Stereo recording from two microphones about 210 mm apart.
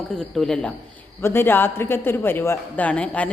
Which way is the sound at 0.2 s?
5° left (ahead or behind).